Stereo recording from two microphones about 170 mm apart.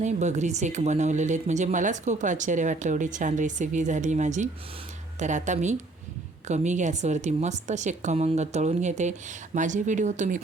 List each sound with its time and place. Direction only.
0.0 s speech: 45° right (ahead or behind)